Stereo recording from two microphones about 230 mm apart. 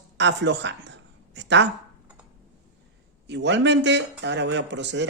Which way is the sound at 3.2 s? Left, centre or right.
Right.